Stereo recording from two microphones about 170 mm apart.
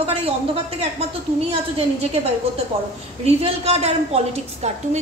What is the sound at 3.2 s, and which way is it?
Speech, 35° right (ahead or behind).